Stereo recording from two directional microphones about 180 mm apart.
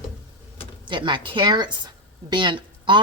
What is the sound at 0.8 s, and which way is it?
A woman's voice, 25° right (ahead or behind).